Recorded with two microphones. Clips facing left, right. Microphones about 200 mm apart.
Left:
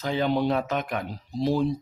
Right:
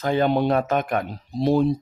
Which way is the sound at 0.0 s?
55° right (ahead or behind).